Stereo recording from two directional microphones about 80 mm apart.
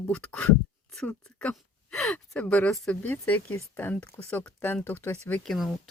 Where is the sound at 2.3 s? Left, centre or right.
Centre.